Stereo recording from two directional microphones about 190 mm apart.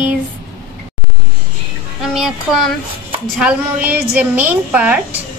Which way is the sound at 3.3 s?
5° right (ahead or behind).